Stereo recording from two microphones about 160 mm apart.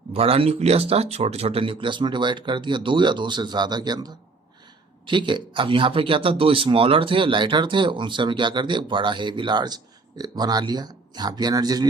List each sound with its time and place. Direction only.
0.1 s speech: 35° right (ahead or behind)